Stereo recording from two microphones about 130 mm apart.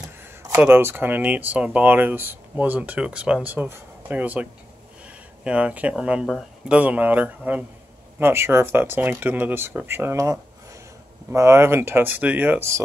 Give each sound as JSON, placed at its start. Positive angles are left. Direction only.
{"t": 0.6, "sound": "speech", "side_deg": -15}